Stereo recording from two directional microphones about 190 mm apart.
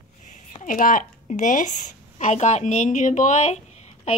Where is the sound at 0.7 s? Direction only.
45° left (ahead or behind).